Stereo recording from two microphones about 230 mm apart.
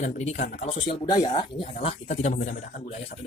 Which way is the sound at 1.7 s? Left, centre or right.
Left.